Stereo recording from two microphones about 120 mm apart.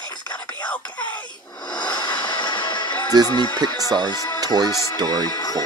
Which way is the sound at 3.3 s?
40° left (ahead or behind).